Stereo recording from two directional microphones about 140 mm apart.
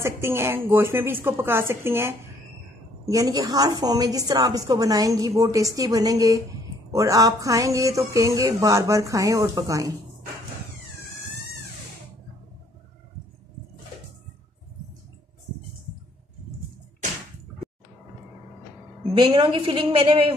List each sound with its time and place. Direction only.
0.0 s a woman's voice: 20° right (ahead or behind)
3.1 s a sound: 25° right (ahead or behind)
19.1 s a woman's voice: 35° right (ahead or behind)